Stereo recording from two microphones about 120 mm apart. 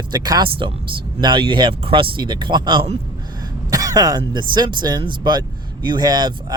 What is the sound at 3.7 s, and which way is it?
Speech, 30° right (ahead or behind).